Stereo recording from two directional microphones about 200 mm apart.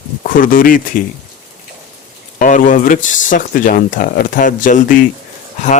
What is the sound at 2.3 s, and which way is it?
Speech, 40° left (ahead or behind).